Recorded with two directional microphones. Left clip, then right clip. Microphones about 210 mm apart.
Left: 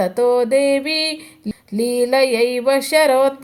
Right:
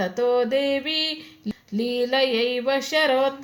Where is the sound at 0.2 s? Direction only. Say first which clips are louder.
Left 6 dB; 30° left (ahead or behind).